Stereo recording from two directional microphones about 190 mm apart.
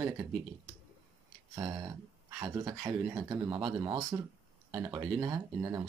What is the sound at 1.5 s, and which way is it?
Speech, 20° right (ahead or behind).